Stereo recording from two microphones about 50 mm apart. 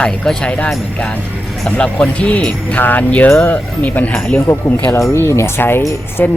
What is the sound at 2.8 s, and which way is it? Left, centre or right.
Speech, left.